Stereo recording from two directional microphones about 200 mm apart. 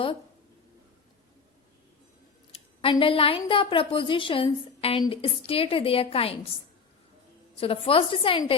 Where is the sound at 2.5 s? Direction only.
25° left (ahead or behind).